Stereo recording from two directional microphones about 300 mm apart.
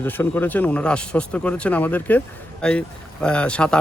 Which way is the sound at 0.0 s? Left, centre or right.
Centre.